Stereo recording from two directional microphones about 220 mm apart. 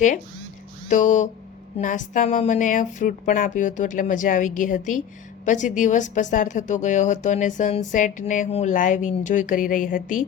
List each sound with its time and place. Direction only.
0.9 s a woman's voice: 35° left (ahead or behind)